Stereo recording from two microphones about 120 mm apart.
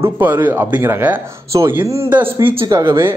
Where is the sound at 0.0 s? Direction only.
20° right (ahead or behind).